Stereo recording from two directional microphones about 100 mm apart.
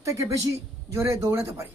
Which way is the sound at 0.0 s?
30° right (ahead or behind).